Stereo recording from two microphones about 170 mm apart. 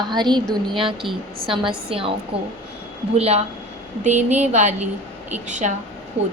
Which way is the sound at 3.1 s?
35° right (ahead or behind).